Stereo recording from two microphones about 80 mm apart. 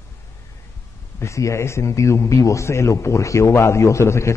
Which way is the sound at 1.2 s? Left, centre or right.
Left.